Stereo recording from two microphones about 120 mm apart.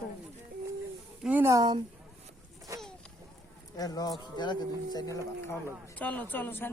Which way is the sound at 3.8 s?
30° left (ahead or behind).